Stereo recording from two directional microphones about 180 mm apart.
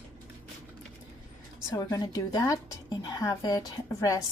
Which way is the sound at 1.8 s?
20° left (ahead or behind).